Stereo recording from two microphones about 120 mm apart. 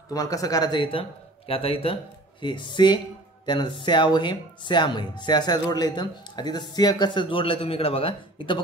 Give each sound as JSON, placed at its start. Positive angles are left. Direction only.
{"t": 0.1, "sound": "speech", "side_deg": 30}
{"t": 2.4, "sound": "speech", "side_deg": 40}